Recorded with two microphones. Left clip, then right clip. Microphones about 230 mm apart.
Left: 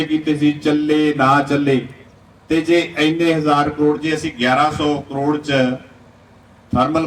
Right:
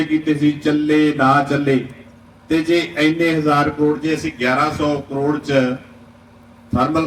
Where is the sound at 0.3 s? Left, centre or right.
Left.